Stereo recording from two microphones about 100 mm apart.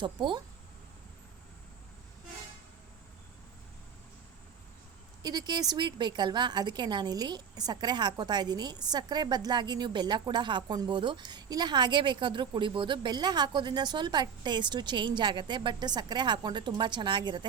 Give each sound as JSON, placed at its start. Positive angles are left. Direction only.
{"t": 0.0, "sound": "a woman's voice", "side_deg": -50}
{"t": 5.2, "sound": "a woman's voice", "side_deg": -45}